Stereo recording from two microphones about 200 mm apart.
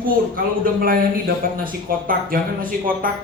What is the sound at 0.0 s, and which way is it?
A man's voice, 45° right (ahead or behind).